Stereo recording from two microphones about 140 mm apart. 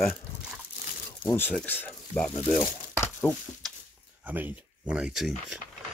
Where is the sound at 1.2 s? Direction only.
15° left (ahead or behind).